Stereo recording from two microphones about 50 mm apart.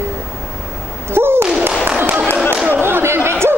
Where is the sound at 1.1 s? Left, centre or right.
Right.